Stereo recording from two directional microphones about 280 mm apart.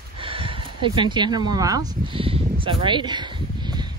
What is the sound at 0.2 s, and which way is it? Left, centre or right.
Speech, centre.